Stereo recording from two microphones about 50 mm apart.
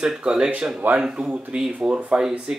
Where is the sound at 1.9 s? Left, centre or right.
Right.